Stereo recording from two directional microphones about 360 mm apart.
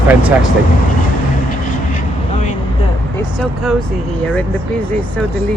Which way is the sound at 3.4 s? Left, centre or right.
Centre.